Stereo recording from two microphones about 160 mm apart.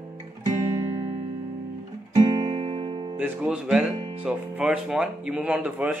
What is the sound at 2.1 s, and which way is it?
Music, 25° right (ahead or behind).